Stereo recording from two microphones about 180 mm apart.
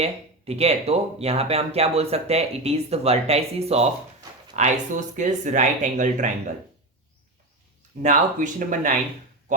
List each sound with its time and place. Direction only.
0.0 s speech: 35° right (ahead or behind)
8.0 s speech: 45° right (ahead or behind)